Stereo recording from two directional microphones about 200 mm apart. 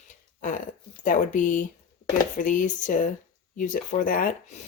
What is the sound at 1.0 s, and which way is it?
Speech, 40° left (ahead or behind).